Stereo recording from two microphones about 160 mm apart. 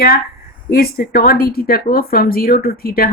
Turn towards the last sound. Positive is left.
turn(degrees=70)  # may be behind; listen again after turning